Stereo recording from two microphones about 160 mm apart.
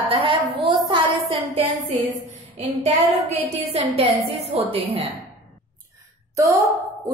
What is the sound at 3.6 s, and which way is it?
Child singing, 40° right (ahead or behind).